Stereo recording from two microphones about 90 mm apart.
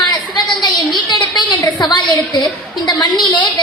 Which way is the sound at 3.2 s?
55° left (ahead or behind).